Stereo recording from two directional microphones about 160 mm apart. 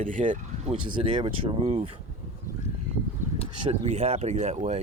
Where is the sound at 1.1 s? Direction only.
35° right (ahead or behind).